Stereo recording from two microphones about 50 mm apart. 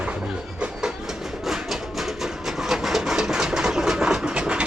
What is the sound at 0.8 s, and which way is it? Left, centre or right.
Train, centre.